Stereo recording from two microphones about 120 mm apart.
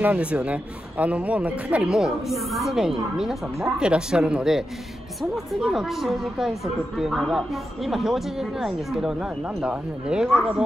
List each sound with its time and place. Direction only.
0.0 s speech: 10° right (ahead or behind)